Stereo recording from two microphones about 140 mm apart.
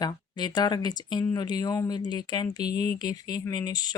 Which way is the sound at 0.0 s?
30° left (ahead or behind).